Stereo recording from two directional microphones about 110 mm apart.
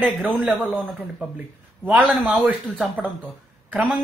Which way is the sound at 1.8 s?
5° right (ahead or behind).